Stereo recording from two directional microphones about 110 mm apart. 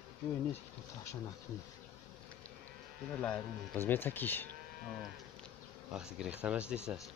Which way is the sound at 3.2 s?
15° left (ahead or behind).